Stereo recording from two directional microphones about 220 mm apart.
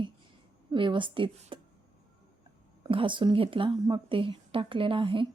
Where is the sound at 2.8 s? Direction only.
25° right (ahead or behind).